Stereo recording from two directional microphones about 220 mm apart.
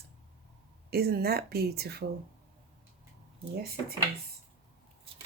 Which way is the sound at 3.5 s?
45° right (ahead or behind).